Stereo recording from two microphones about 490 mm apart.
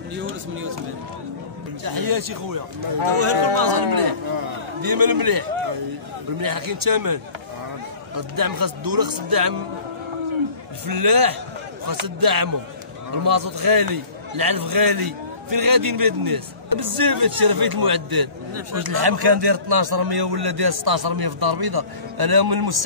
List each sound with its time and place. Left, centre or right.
0.1 s speech: right
1.9 s a man's voice: right
3.2 s speech: right
3.7 s a man's voice: right
6.4 s a man's voice: right
8.2 s a man's voice: right
10.9 s a man's voice: right